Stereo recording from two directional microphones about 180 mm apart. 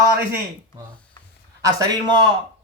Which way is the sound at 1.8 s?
20° right (ahead or behind).